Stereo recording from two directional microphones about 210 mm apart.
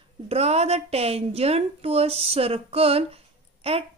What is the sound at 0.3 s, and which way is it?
A woman's voice, 30° right (ahead or behind).